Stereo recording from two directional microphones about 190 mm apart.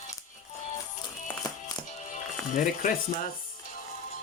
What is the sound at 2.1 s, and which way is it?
Speech, 45° left (ahead or behind).